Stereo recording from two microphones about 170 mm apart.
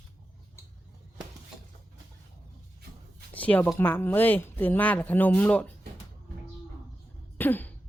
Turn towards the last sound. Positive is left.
turn(degrees=10)  # may be behind; listen again after turning